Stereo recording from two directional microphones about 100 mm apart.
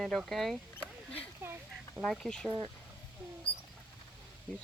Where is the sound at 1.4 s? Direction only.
25° right (ahead or behind).